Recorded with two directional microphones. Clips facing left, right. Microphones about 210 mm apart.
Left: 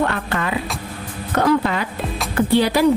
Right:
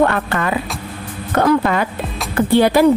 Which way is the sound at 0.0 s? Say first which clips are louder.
Right 5 dB; 55° right (ahead or behind).